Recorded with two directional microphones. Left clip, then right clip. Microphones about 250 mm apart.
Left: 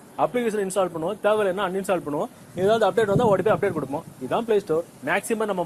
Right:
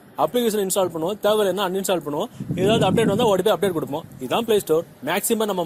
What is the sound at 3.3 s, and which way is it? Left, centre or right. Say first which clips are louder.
Speech: right 1 dB; right.